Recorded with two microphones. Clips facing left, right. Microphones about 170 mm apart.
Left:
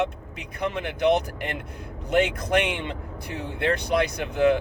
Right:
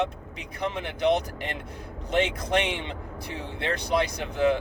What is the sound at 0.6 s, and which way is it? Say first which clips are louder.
Speech: left 2 dB; 55° left (ahead or behind).